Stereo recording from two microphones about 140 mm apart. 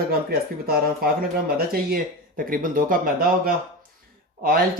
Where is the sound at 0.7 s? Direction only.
90° right.